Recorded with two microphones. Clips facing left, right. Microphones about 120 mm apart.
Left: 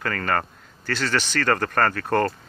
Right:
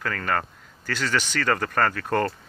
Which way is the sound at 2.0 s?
40° left (ahead or behind).